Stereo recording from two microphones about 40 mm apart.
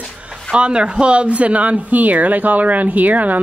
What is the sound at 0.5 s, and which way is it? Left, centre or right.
A woman's voice, right.